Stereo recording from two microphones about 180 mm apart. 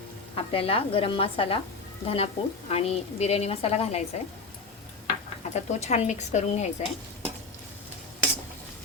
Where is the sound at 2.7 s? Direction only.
35° left (ahead or behind).